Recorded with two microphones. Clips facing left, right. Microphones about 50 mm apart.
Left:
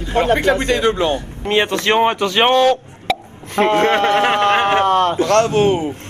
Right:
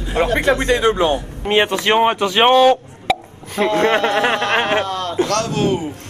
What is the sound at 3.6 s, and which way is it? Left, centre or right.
Speech, left.